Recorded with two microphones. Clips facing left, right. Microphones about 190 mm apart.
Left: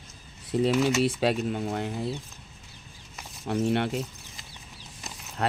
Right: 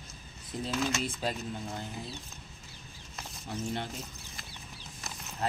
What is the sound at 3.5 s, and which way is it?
Speech, 70° left (ahead or behind).